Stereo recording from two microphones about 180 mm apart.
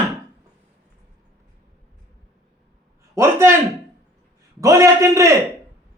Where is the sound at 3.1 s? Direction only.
15° right (ahead or behind).